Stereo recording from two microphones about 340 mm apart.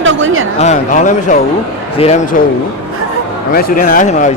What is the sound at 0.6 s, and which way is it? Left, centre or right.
Speech, left.